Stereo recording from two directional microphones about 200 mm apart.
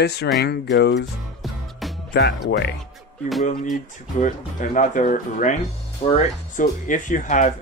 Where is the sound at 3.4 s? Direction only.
40° left (ahead or behind).